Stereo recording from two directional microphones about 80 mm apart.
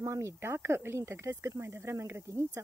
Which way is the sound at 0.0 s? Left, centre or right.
Right.